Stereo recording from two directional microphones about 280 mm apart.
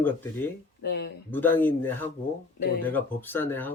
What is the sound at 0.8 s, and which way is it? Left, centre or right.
Speech, left.